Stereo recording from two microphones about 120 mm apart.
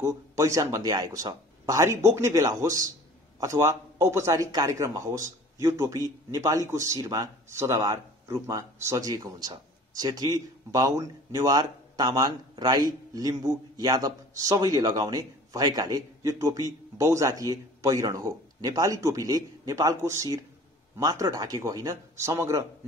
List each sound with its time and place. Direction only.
0.0 s speech: 25° right (ahead or behind)